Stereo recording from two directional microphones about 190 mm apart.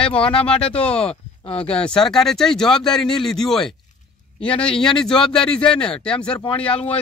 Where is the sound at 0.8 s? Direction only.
30° left (ahead or behind).